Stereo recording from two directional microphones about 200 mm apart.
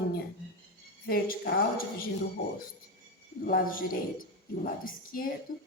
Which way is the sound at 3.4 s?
45° left (ahead or behind).